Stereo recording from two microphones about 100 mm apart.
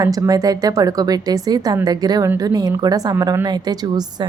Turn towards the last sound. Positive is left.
turn(degrees=-45)  # may be behind; listen again after turning